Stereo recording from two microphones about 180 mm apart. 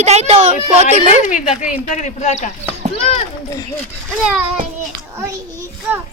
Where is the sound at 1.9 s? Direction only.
40° left (ahead or behind).